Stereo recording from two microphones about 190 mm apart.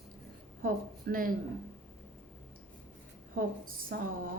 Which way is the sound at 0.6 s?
50° right (ahead or behind).